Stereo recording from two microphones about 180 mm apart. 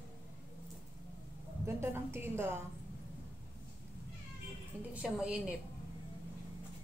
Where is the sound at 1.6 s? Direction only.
15° right (ahead or behind).